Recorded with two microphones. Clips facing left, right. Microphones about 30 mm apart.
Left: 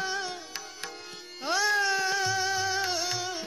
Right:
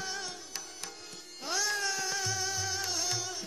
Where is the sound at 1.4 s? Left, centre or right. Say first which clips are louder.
Left 7 dB; left.